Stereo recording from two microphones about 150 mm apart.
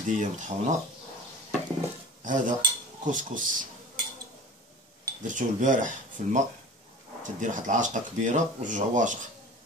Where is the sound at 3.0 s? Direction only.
60° right (ahead or behind).